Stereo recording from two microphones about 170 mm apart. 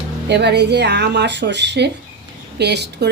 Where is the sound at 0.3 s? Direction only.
85° right.